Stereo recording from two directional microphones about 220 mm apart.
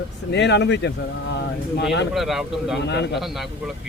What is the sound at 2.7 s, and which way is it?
Speech, 50° left (ahead or behind).